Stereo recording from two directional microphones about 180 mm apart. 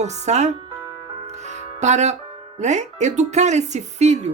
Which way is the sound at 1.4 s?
40° right (ahead or behind).